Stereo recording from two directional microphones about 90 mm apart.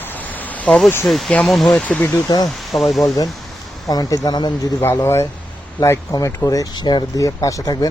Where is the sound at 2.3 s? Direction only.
45° left (ahead or behind).